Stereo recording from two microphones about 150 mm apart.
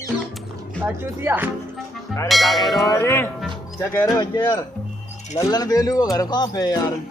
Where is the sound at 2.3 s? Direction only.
Centre (ahead or behind).